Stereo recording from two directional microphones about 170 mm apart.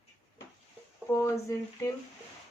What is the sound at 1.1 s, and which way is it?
Speech, 15° left (ahead or behind).